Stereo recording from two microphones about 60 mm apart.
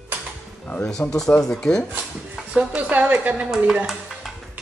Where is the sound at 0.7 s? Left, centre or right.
Centre.